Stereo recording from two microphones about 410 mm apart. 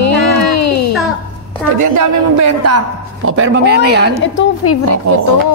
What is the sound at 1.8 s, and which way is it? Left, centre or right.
A woman's voice, right.